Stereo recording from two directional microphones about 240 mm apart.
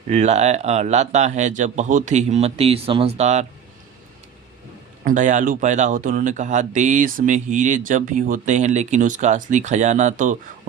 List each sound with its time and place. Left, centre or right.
0.1 s a man's voice: right
5.0 s speech: right